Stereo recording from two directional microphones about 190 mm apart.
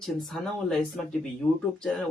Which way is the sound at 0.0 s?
Centre (ahead or behind).